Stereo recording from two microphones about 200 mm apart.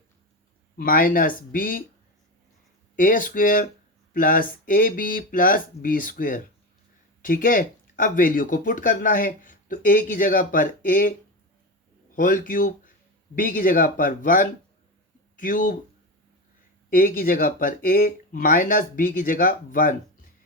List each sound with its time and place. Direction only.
0.8 s speech: 45° left (ahead or behind)
2.9 s speech: 45° left (ahead or behind)
12.1 s speech: 40° left (ahead or behind)
16.9 s speech: 45° left (ahead or behind)